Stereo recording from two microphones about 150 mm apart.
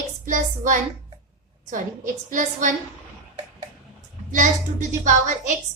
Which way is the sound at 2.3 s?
60° right (ahead or behind).